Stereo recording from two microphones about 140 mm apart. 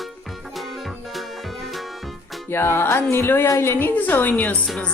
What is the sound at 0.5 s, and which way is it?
Music, centre (ahead or behind).